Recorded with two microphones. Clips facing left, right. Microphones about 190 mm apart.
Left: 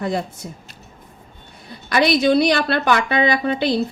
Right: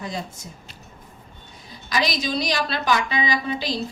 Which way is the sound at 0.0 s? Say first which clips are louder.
Left 8 dB; 60° left (ahead or behind).